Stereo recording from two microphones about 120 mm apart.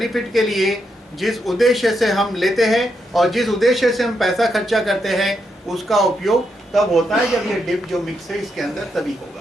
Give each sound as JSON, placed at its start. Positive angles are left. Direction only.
{"t": 0.0, "sound": "speech", "side_deg": 0}
{"t": 8.6, "sound": "speech", "side_deg": 0}